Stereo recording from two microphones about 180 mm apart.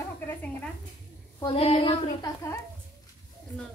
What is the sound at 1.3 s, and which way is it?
A woman's voice, 30° left (ahead or behind).